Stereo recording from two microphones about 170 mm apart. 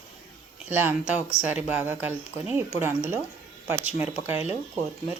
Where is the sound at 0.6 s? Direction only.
10° right (ahead or behind).